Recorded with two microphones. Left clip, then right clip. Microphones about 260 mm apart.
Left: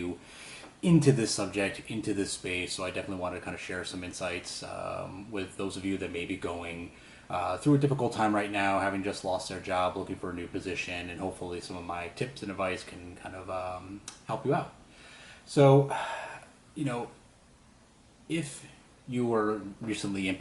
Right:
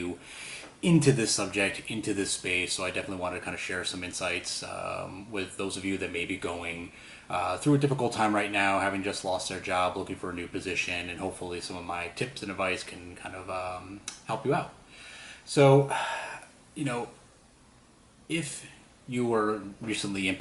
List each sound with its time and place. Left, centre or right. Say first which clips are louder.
0.0 s speech: right 2 dB; centre
11.3 s speech: right 1 dB; left
11.5 s speech: right 2 dB; centre
15.9 s a sound: right 3 dB; centre
19.1 s speech: right 1 dB; centre